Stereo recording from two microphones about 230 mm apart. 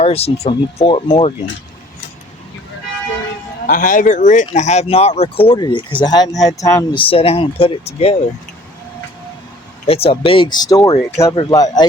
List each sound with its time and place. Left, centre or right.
0.0 s speech: left
3.7 s speech: left
9.8 s speech: left